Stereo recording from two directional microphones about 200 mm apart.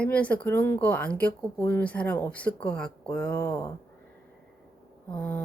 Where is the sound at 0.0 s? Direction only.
5° left (ahead or behind).